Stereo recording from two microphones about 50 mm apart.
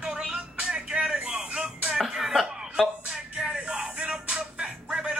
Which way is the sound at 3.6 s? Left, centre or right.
Right.